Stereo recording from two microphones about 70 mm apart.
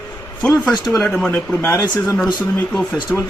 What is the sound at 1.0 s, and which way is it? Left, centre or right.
Speech, centre.